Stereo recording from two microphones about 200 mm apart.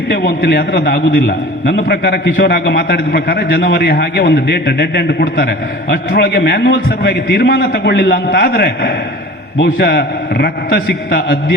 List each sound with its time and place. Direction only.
0.1 s a man's voice: 55° left (ahead or behind)